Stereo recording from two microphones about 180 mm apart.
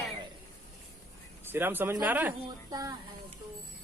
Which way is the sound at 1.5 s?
10° right (ahead or behind).